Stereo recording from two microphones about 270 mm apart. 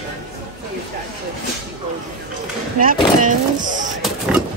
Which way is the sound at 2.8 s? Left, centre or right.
Right.